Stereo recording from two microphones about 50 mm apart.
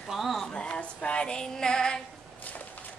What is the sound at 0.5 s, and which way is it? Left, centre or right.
Female singing, left.